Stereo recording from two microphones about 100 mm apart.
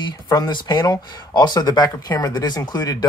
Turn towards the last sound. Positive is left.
turn(degrees=45)  # may be behind; listen again after turning